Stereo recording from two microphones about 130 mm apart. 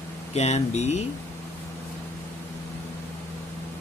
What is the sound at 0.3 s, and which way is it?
Speech, 55° left (ahead or behind).